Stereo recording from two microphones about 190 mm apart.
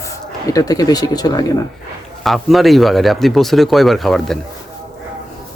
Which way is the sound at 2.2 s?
Centre (ahead or behind).